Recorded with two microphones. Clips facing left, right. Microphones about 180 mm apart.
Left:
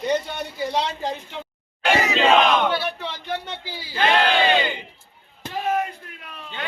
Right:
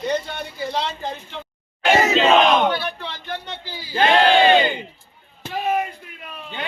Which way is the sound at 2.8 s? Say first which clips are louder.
Left 1 dB; 5° left (ahead or behind).